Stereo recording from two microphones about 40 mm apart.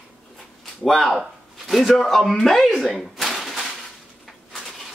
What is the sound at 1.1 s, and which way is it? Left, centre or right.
Speech, centre.